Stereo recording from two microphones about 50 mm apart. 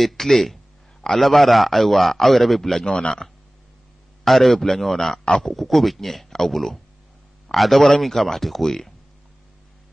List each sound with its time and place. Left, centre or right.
0.0 s a man's voice: centre
2.8 s speech: centre
4.2 s a man's voice: centre